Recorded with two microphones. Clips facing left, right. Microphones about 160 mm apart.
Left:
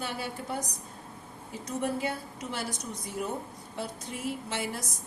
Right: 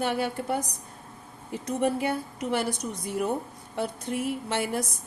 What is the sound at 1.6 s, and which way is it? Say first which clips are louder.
Speech: right 5 dB; 60° right (ahead or behind).